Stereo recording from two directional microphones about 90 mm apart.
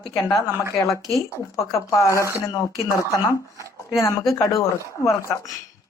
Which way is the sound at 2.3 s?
40° left (ahead or behind).